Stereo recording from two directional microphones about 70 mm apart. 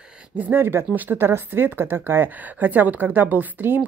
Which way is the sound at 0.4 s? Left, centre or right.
Right.